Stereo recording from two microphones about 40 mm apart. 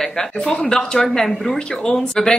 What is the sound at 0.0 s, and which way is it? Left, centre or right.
A woman's voice, centre.